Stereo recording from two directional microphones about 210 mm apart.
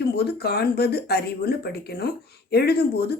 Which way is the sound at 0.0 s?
50° left (ahead or behind).